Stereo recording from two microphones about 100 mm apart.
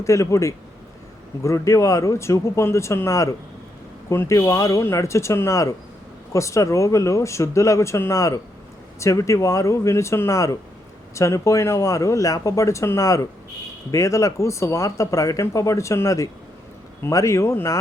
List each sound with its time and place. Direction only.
0.0 s speech: 30° left (ahead or behind)